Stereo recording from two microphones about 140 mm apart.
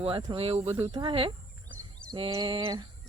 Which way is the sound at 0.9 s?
35° right (ahead or behind).